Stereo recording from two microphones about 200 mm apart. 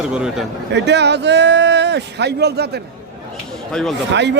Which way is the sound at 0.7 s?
60° right (ahead or behind).